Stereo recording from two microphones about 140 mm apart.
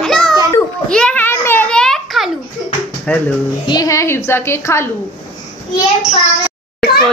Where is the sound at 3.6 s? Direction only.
30° left (ahead or behind).